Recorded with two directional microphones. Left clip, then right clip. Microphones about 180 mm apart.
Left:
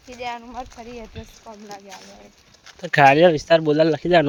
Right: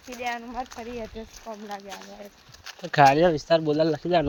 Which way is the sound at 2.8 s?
50° left (ahead or behind).